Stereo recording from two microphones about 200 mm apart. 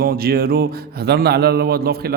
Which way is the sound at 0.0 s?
50° right (ahead or behind).